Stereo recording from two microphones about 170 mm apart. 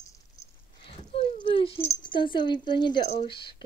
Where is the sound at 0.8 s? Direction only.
30° left (ahead or behind).